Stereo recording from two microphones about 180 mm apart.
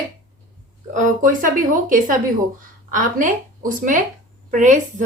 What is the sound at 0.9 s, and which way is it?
A woman's voice, 45° right (ahead or behind).